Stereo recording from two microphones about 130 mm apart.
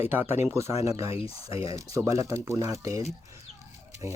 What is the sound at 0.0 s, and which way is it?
Speech, 15° right (ahead or behind).